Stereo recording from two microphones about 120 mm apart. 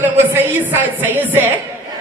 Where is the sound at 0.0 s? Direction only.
20° right (ahead or behind).